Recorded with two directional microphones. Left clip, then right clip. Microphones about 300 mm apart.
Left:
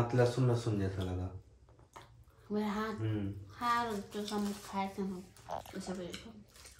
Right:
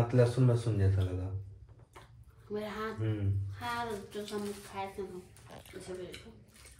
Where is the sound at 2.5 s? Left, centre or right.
Centre.